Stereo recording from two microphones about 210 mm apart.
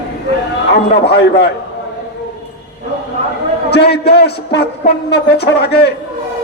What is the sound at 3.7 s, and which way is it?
A man's voice, 50° left (ahead or behind).